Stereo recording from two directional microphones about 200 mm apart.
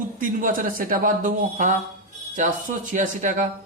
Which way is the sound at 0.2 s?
40° right (ahead or behind).